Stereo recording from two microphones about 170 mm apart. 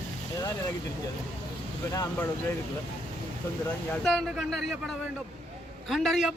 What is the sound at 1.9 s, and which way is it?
Speech, 20° left (ahead or behind).